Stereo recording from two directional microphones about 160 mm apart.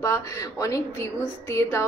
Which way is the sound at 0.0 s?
20° left (ahead or behind).